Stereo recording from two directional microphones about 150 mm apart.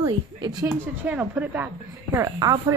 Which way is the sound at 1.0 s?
10° right (ahead or behind).